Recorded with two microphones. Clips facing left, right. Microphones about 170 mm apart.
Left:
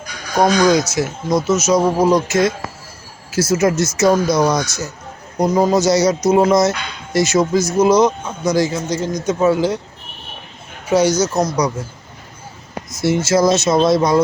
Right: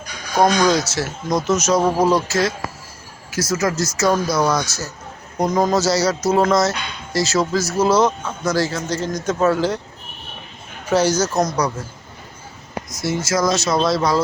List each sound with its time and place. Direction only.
0.3 s speech: 10° left (ahead or behind)
10.8 s speech: 10° left (ahead or behind)
12.9 s speech: 25° left (ahead or behind)